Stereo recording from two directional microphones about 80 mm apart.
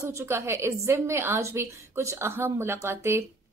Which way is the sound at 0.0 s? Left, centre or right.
Right.